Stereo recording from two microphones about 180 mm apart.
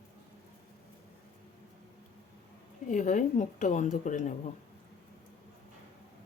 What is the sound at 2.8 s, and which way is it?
Speech, 45° left (ahead or behind).